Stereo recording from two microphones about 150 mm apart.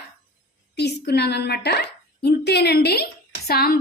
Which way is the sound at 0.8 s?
90° left.